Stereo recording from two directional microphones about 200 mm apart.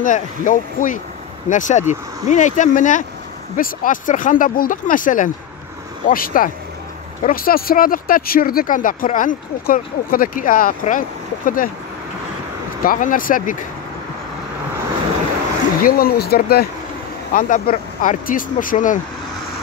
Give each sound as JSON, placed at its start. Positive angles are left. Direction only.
{"t": 0.0, "sound": "speech", "side_deg": 40}
{"t": 12.8, "sound": "speech", "side_deg": 45}
{"t": 15.8, "sound": "speech", "side_deg": 45}